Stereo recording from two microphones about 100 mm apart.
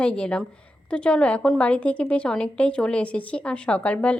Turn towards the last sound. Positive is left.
turn(degrees=15)  # may be behind; listen again after turning